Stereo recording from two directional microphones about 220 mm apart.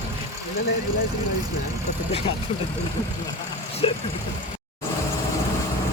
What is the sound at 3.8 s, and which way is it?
Speech, 25° left (ahead or behind).